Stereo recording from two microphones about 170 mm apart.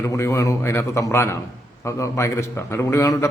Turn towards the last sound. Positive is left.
turn(degrees=20)  # may be behind; listen again after turning